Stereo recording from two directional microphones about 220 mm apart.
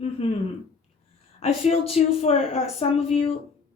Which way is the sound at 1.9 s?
30° left (ahead or behind).